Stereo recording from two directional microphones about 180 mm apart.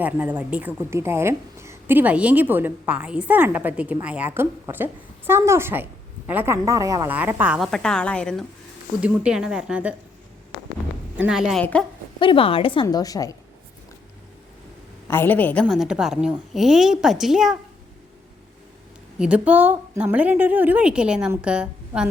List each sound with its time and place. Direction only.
0.0 s a woman's voice: 10° right (ahead or behind)
9.0 s a woman's voice: 5° right (ahead or behind)
11.2 s a woman's voice: 5° right (ahead or behind)
12.2 s a woman's voice: 30° left (ahead or behind)
15.0 s a woman's voice: 10° left (ahead or behind)
15.6 s a woman's voice: 5° right (ahead or behind)
19.2 s a woman's voice: 10° right (ahead or behind)